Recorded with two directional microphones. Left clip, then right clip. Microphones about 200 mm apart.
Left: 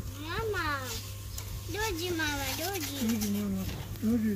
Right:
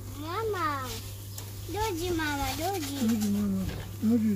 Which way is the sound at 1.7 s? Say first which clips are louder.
Right 2 dB; 40° right (ahead or behind).